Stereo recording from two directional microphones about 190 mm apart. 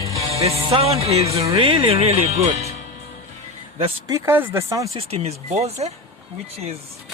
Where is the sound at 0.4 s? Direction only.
30° right (ahead or behind).